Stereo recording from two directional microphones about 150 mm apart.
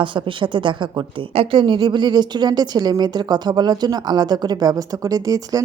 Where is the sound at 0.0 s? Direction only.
35° right (ahead or behind).